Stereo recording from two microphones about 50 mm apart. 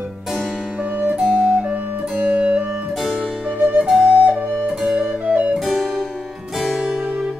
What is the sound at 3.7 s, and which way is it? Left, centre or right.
Flute, centre.